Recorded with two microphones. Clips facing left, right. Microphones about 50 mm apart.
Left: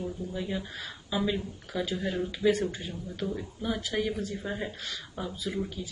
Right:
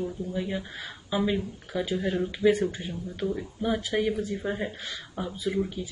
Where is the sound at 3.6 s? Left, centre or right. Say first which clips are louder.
Right 4 dB; centre.